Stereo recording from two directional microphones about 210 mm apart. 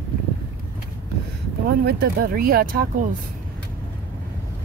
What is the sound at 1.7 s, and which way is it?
Speech, 45° right (ahead or behind).